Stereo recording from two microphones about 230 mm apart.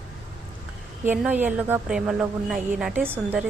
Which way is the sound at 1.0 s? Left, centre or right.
Centre.